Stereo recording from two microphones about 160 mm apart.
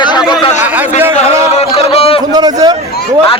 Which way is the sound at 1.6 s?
40° left (ahead or behind).